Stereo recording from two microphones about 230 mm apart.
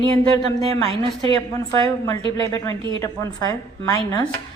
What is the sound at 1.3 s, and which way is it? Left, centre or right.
A woman's voice, centre.